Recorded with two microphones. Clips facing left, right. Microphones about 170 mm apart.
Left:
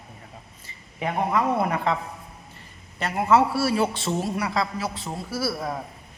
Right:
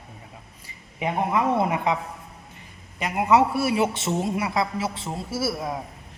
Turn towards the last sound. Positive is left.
turn(degrees=-20)  # may be behind; listen again after turning